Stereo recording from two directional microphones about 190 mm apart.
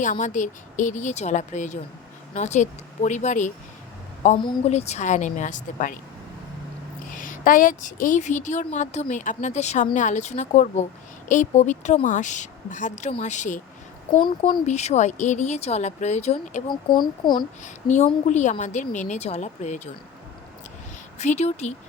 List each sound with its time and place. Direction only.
0.0 s a woman's voice: 40° left (ahead or behind)
7.1 s a woman's voice: 45° left (ahead or behind)
14.2 s speech: 25° left (ahead or behind)
14.7 s a woman's voice: 35° left (ahead or behind)
16.9 s speech: 25° left (ahead or behind)
17.6 s a woman's voice: 40° left (ahead or behind)
21.2 s a woman's voice: 35° left (ahead or behind)